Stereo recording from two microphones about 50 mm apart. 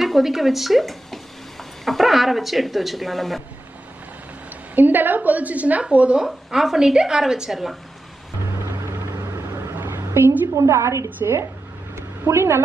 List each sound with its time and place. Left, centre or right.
0.0 s speech: centre
4.7 s a woman's voice: right
6.2 s a woman's voice: centre
9.8 s a sound: right
10.5 s a woman's voice: right
11.9 s a sound: right